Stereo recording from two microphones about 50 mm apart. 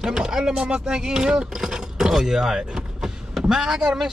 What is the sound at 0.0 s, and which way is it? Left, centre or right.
Speech, centre.